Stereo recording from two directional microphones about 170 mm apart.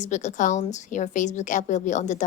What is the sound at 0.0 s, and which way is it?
A woman's voice, 45° left (ahead or behind).